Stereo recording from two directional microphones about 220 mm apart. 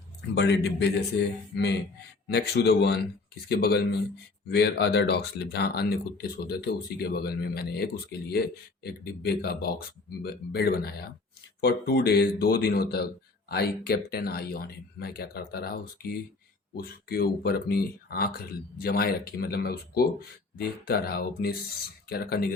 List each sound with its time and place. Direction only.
0.3 s speech: 50° left (ahead or behind)